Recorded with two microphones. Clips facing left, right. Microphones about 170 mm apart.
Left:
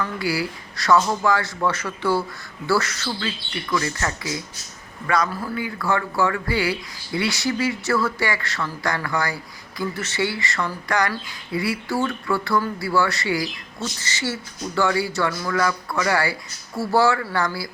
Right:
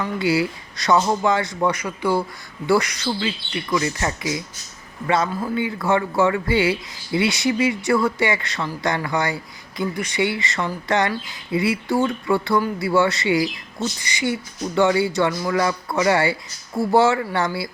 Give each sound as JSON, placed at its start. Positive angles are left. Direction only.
{"t": 0.0, "sound": "speech", "side_deg": -20}